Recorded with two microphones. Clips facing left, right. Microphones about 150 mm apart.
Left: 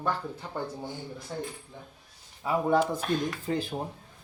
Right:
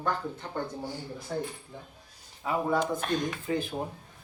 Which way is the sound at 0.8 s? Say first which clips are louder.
Right 1 dB; 20° left (ahead or behind).